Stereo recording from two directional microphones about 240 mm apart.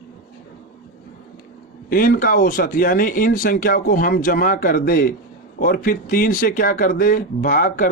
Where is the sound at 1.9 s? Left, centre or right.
Left.